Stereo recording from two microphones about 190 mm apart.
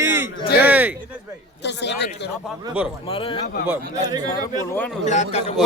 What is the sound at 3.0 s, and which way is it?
Speech, 30° left (ahead or behind).